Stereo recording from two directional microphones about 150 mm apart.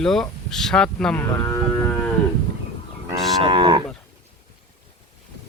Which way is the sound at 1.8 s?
10° left (ahead or behind).